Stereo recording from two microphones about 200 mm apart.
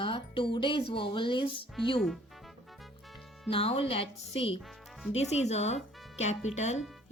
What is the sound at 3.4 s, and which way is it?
A woman's voice, 30° left (ahead or behind).